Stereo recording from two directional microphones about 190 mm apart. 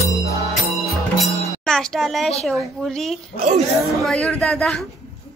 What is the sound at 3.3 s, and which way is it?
Speech, 35° right (ahead or behind).